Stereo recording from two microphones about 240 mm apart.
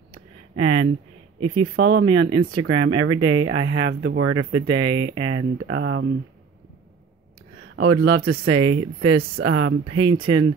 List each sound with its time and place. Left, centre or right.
0.6 s speech: right
1.8 s speech: right
2.1 s speech: right
7.7 s speech: right
9.9 s speech: right